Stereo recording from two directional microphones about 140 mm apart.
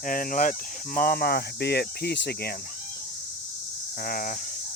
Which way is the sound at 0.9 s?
90° left.